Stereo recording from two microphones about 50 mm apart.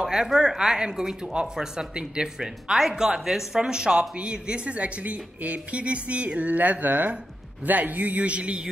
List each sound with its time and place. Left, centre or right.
0.0 s speech: centre